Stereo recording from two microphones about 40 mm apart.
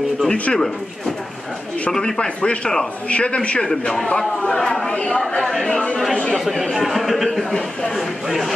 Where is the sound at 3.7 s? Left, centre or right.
Centre.